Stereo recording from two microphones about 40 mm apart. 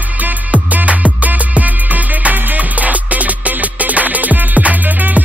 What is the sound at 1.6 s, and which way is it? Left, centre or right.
Music, right.